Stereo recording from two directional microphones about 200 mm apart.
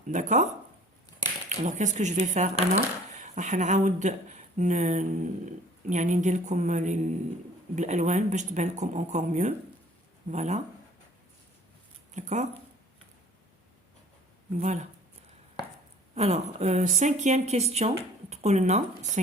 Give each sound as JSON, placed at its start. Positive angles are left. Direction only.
{"t": 0.1, "sound": "speech", "side_deg": -40}
{"t": 12.1, "sound": "speech", "side_deg": -35}
{"t": 14.6, "sound": "speech", "side_deg": -35}
{"t": 16.1, "sound": "speech", "side_deg": -35}